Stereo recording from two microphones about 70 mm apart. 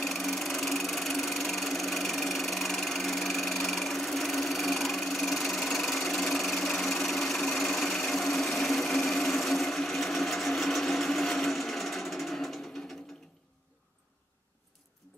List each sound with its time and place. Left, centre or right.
0.0 s engine: centre